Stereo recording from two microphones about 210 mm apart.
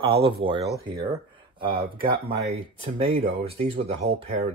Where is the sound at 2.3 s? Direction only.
25° right (ahead or behind).